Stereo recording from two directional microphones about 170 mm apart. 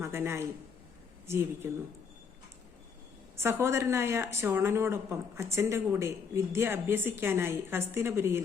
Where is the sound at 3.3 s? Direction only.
15° right (ahead or behind).